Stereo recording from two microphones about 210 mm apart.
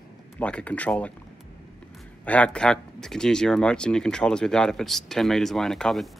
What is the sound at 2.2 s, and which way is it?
Speech, 5° left (ahead or behind).